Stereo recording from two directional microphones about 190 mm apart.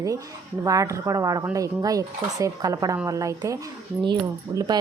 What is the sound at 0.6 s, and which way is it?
Speech, 15° right (ahead or behind).